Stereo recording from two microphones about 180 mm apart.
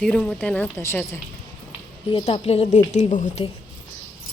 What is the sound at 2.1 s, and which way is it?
A woman's voice, 30° left (ahead or behind).